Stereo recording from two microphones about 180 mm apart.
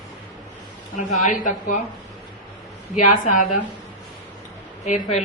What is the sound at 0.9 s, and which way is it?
Speech, 45° left (ahead or behind).